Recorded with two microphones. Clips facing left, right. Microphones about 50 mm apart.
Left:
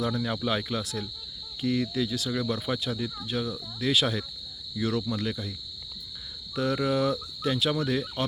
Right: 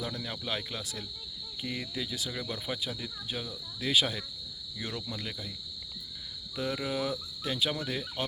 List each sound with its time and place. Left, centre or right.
0.0 s speech: centre
6.6 s speech: centre